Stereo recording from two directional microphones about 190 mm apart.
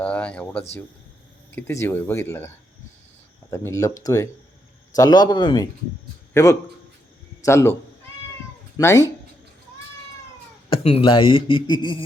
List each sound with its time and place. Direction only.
0.0 s a sound: 5° left (ahead or behind)
1.5 s speech: 15° left (ahead or behind)
3.5 s a man's voice: 15° left (ahead or behind)
8.8 s speech: 15° left (ahead or behind)
10.7 s speech: 30° left (ahead or behind)